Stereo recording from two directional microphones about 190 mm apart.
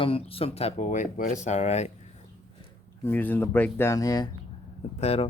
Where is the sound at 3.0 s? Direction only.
10° left (ahead or behind).